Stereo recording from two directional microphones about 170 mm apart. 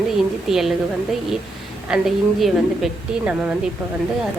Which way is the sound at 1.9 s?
Centre (ahead or behind).